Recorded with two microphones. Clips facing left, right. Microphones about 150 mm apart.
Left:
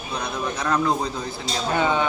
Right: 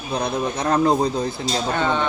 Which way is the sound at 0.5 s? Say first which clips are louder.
Right 4 dB; 35° right (ahead or behind).